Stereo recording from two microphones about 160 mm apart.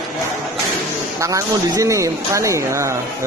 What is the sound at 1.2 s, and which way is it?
Speech, 20° right (ahead or behind).